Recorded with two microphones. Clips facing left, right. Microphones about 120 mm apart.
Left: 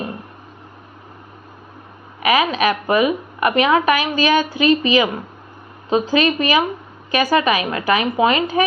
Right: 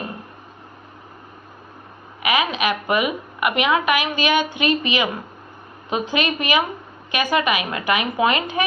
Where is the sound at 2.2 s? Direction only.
35° left (ahead or behind).